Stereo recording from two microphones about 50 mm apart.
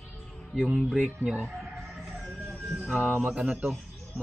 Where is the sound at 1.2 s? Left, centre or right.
Centre.